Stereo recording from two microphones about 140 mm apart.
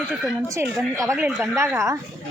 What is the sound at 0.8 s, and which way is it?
Speech, centre (ahead or behind).